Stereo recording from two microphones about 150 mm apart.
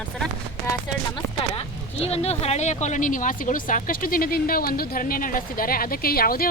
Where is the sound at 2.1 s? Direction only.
45° left (ahead or behind).